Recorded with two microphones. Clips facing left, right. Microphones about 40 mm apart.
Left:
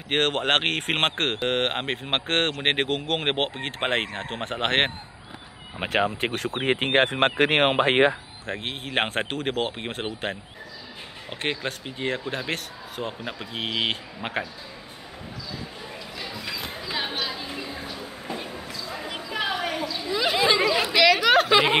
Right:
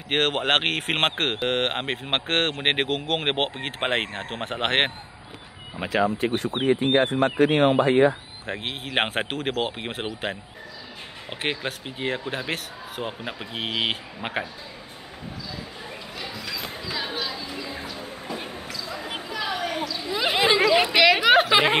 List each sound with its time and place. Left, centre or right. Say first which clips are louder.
0.1 s speech: even; centre
5.9 s speech: right 1 dB; left
6.6 s speech: right 1 dB; left
7.6 s speech: right 2 dB; left
8.5 s speech: even; centre
11.2 s speech: even; centre
16.2 s a sound: even; centre
16.8 s chatter: left 1 dB; left
18.7 s basketball bounce: right 1 dB; left
19.0 s a sound: right 1 dB; right
19.3 s a sound: left 1 dB; left
20.3 s chatter: right 3 dB; right
21.0 s speech: left 1 dB; centre